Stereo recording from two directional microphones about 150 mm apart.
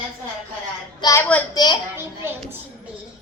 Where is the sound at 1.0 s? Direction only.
20° left (ahead or behind).